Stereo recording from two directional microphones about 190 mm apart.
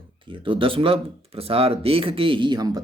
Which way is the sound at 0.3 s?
25° right (ahead or behind).